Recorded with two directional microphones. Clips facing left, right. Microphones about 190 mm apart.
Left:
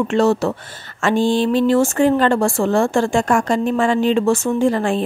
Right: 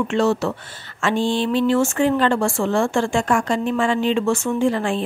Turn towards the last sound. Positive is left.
turn(degrees=40)  # may be behind; listen again after turning